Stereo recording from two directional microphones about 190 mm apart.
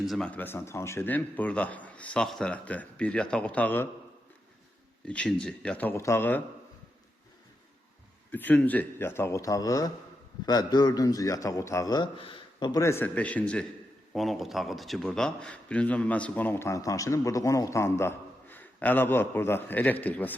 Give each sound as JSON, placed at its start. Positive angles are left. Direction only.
{"t": 0.0, "sound": "a man's voice", "side_deg": 0}
{"t": 5.0, "sound": "a man's voice", "side_deg": 5}
{"t": 8.3, "sound": "a man's voice", "side_deg": 10}